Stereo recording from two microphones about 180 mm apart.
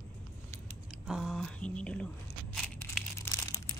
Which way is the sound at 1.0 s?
Centre (ahead or behind).